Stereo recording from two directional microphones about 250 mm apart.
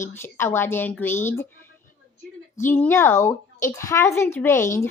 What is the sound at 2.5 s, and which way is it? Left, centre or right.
Speech, centre.